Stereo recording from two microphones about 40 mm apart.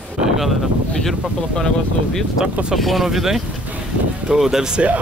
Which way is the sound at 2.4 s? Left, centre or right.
Right.